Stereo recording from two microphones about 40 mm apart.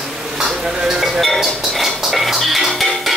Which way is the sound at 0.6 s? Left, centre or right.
Centre.